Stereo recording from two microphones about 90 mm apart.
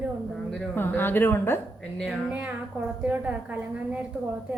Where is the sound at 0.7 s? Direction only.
25° left (ahead or behind).